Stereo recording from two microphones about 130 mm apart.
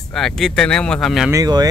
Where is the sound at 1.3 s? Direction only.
30° right (ahead or behind).